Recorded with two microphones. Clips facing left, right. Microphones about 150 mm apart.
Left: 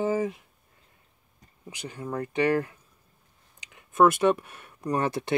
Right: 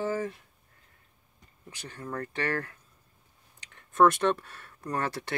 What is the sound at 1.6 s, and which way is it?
Speech, 15° left (ahead or behind).